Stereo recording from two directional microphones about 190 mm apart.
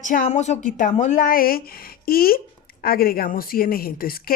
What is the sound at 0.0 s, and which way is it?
A woman's voice, 40° left (ahead or behind).